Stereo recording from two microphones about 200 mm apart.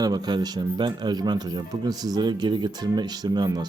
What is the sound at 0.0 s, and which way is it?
Speech, 20° right (ahead or behind).